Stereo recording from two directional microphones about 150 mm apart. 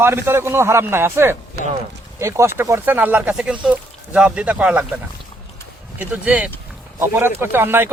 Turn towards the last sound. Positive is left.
turn(degrees=-15)  # may be behind; listen again after turning